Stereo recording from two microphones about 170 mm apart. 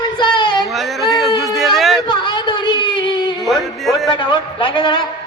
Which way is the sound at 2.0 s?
25° left (ahead or behind).